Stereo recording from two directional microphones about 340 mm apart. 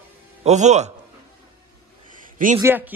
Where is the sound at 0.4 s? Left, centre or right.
Centre.